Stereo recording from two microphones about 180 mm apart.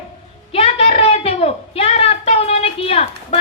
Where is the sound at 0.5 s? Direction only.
35° left (ahead or behind).